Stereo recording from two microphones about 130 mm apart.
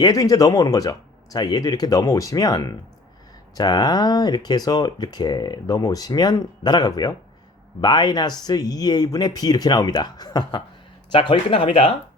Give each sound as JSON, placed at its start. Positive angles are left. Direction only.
{"t": 0.0, "sound": "speech", "side_deg": 25}